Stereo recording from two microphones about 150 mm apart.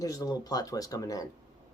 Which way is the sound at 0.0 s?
25° left (ahead or behind).